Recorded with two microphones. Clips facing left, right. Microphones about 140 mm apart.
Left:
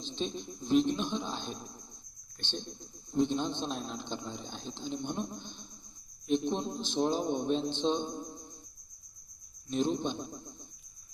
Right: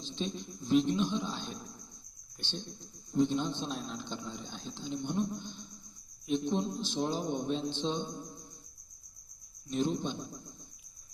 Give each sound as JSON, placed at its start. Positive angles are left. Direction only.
{"t": 0.0, "sound": "speech", "side_deg": 20}
{"t": 9.7, "sound": "speech", "side_deg": 20}